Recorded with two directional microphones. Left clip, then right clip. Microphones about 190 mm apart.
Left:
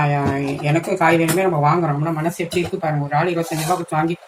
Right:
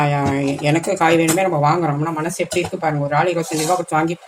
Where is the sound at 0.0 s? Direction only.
55° right (ahead or behind).